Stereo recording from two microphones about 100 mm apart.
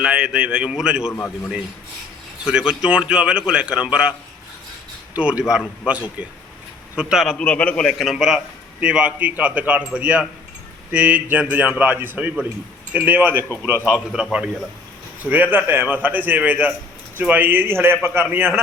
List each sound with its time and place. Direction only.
0.0 s a man's voice: 10° right (ahead or behind)
2.4 s a man's voice: 10° right (ahead or behind)
5.1 s a man's voice: 10° right (ahead or behind)
7.4 s a man's voice: 15° left (ahead or behind); by 13.4 s 15° right (ahead or behind)
14.1 s a man's voice: 5° right (ahead or behind)
15.3 s a man's voice: 15° right (ahead or behind)